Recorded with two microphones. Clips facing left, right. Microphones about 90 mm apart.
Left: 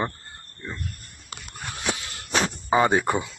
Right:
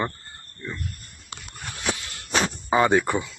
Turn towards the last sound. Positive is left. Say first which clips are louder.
# left 1 dB
turn(degrees=15)  # may be behind; listen again after turning